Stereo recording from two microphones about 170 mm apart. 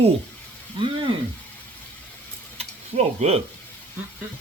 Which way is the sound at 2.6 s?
35° right (ahead or behind).